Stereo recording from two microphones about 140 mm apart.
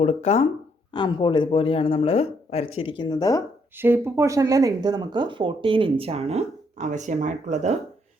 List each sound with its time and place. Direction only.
0.0 s speech: 50° left (ahead or behind)
0.9 s speech: 35° left (ahead or behind)
3.8 s speech: 15° right (ahead or behind); by 7.8 s 55° right (ahead or behind)